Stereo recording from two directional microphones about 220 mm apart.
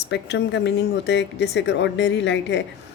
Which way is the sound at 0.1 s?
50° left (ahead or behind).